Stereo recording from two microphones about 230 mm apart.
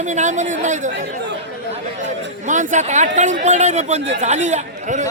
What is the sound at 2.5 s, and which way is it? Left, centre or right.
Speech, right.